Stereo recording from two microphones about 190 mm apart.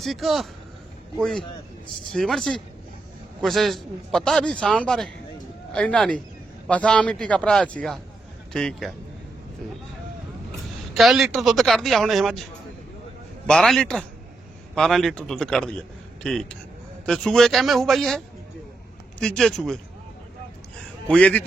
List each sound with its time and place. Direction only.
0.0 s a man's voice: centre (ahead or behind)
2.1 s a man's voice: centre (ahead or behind)
10.9 s a man's voice: centre (ahead or behind)
13.5 s a man's voice: centre (ahead or behind)
19.2 s a man's voice: 5° left (ahead or behind)
21.1 s a man's voice: 5° left (ahead or behind)